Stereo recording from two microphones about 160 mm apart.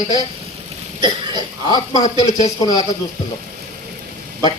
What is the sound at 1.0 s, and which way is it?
Speech, 30° right (ahead or behind).